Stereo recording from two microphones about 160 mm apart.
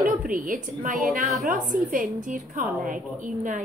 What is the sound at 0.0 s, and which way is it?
A woman's voice, 55° right (ahead or behind).